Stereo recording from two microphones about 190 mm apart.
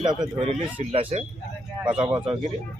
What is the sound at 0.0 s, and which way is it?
Speech, 25° right (ahead or behind).